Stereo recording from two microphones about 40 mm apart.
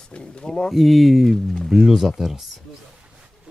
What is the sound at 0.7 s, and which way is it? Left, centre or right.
Speech, centre.